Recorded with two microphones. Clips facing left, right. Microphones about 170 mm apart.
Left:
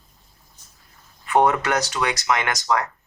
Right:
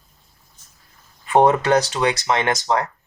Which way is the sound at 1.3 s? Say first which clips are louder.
Right 4 dB; 25° right (ahead or behind).